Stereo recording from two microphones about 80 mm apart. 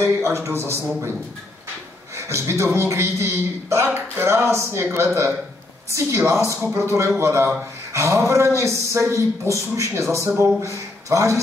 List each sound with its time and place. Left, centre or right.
0.0 s a man's voice: right
2.1 s a man's voice: right